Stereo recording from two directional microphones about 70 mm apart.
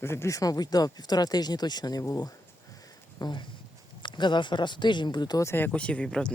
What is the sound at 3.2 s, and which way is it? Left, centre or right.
Speech, left.